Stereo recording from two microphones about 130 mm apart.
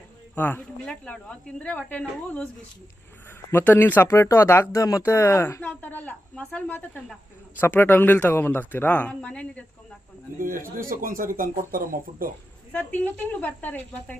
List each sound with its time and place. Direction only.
0.3 s speech: 15° left (ahead or behind)
3.5 s speech: 15° left (ahead or behind)
10.3 s speech: 90° right
12.7 s speech: 15° left (ahead or behind)